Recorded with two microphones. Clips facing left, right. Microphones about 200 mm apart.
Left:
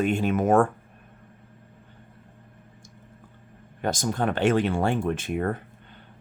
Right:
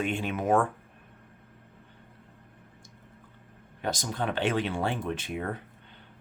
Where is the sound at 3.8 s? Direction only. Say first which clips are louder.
Left 5 dB; 50° left (ahead or behind).